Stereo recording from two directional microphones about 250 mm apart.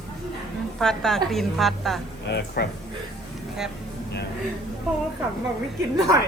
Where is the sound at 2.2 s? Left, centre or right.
Left.